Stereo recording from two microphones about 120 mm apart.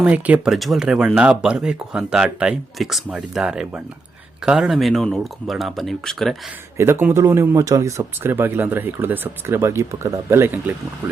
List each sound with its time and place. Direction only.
0.0 s speech: 10° right (ahead or behind)
6.7 s speech: 20° right (ahead or behind)